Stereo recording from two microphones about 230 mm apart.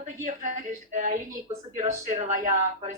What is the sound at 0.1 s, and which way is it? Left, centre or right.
Speech, right.